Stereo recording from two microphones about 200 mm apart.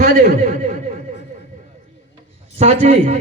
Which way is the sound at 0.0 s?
45° right (ahead or behind).